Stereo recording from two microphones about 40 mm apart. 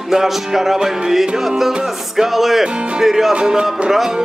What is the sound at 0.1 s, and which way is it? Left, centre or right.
Music, centre.